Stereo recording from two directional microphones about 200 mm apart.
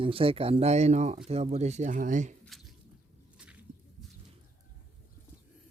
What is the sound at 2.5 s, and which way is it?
Squish, centre (ahead or behind).